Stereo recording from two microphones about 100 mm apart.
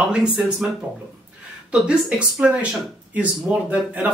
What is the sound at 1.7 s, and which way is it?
Speech, 10° right (ahead or behind).